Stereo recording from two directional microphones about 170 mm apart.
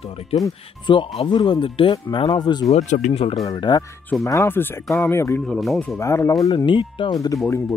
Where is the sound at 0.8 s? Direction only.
30° left (ahead or behind).